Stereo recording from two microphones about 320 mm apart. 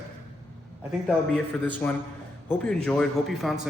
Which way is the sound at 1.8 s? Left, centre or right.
Centre.